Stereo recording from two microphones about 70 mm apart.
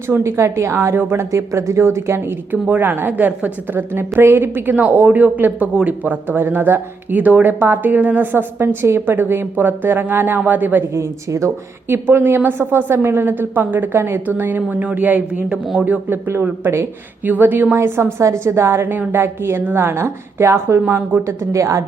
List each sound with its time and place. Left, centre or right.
0.1 s a woman's voice: right
2.5 s speech: right
10.9 s a woman's voice: right
11.9 s a woman's voice: right
16.0 s a woman's voice: right
20.8 s speech: right
21.2 s a woman's voice: right